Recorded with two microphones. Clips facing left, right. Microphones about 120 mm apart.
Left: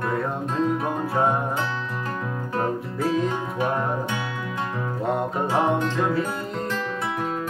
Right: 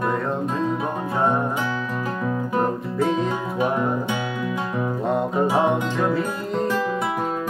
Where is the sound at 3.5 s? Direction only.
10° right (ahead or behind).